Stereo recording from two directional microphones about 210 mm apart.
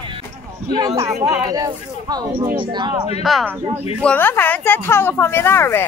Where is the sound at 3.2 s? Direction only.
Centre (ahead or behind).